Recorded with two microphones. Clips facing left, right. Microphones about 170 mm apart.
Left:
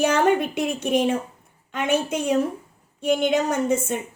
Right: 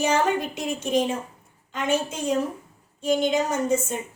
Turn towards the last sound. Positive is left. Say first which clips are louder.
# left 2 dB
turn(degrees=60)  # may be behind; listen again after turning